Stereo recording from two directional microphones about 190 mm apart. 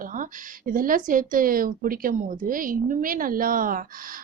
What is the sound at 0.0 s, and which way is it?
Speech, 45° right (ahead or behind).